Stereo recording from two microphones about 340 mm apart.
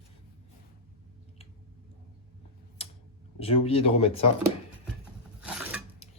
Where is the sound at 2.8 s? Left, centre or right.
Centre.